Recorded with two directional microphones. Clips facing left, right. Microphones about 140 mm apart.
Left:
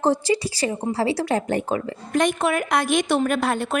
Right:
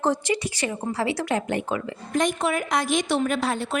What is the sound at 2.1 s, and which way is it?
A woman's voice, 65° left (ahead or behind).